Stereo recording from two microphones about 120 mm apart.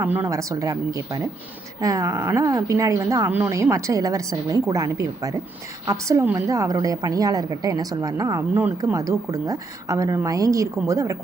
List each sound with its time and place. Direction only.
0.0 s a woman's voice: 15° right (ahead or behind)